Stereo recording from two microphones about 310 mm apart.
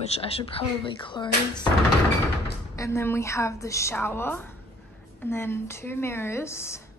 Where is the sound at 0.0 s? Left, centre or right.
Centre.